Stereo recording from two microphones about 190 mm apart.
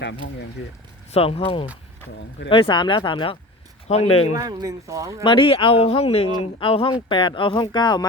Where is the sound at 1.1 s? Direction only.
30° left (ahead or behind).